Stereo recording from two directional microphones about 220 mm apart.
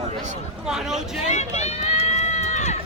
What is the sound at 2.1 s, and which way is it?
Run, 30° left (ahead or behind).